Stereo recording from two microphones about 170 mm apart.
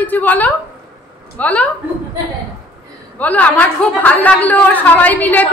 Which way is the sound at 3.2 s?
10° left (ahead or behind).